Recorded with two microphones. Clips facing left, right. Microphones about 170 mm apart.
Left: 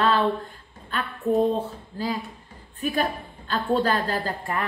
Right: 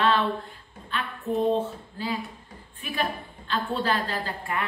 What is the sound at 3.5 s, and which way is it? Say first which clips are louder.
A woman's voice: left 4 dB; 40° left (ahead or behind).